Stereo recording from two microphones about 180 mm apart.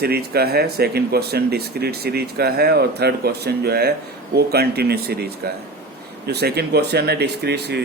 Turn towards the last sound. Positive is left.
turn(degrees=-65)  # may be behind; listen again after turning